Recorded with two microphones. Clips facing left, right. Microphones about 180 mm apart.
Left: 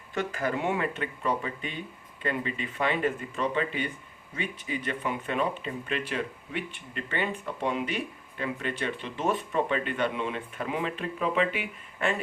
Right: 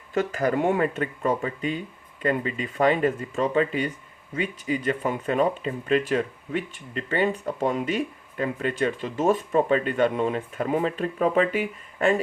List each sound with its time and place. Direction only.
0.1 s speech: 40° right (ahead or behind)